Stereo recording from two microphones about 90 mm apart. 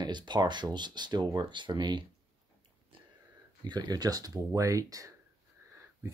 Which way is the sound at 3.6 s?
55° right (ahead or behind).